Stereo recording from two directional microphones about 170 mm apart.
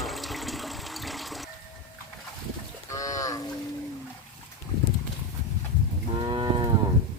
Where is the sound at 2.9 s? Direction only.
20° left (ahead or behind).